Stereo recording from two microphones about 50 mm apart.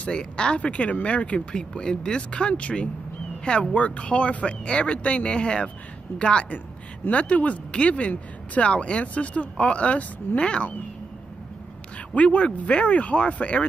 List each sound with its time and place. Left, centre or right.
0.0 s speech: centre
12.1 s speech: left